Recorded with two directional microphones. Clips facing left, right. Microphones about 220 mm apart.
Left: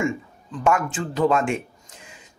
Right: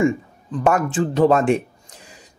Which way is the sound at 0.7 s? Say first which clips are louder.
Right 4 dB; 35° right (ahead or behind).